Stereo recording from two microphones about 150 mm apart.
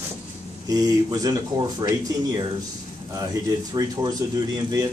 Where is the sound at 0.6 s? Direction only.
25° right (ahead or behind).